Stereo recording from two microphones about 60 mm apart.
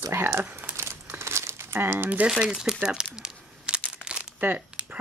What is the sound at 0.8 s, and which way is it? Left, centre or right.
Crumpling, right.